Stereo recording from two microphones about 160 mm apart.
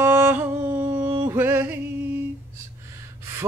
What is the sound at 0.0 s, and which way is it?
Humming, 15° right (ahead or behind).